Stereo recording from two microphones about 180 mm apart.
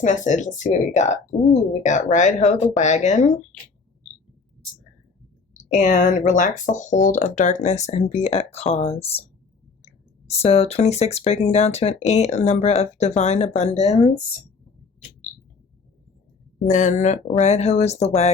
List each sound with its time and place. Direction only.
0.0 s speech: 45° left (ahead or behind)
5.7 s speech: 45° left (ahead or behind)
16.6 s speech: 45° left (ahead or behind)